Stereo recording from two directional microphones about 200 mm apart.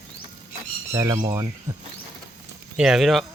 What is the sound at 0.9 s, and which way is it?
Speech, 20° right (ahead or behind).